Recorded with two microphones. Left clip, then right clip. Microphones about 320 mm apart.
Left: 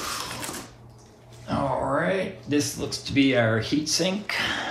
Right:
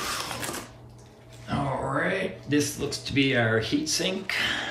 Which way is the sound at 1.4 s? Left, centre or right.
Centre.